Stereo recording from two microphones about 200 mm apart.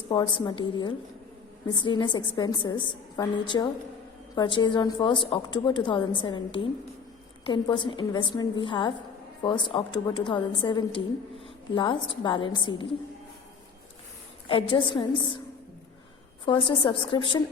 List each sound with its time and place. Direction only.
0.1 s a woman's voice: 20° left (ahead or behind)
14.4 s a woman's voice: 25° left (ahead or behind)
16.5 s a woman's voice: 25° left (ahead or behind)